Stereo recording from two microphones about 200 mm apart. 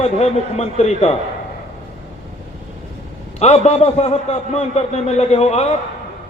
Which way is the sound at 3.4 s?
30° left (ahead or behind).